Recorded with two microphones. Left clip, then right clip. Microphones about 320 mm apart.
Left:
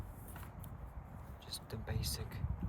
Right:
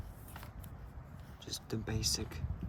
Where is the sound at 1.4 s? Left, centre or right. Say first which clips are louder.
Right 5 dB; right.